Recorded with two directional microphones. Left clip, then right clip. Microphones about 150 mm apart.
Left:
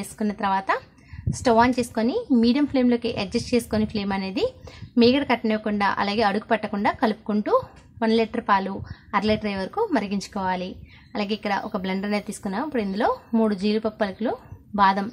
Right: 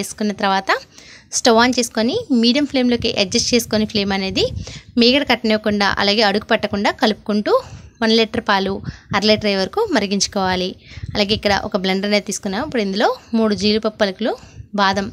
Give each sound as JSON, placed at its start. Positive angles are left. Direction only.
{"t": 0.0, "sound": "a woman's voice", "side_deg": -30}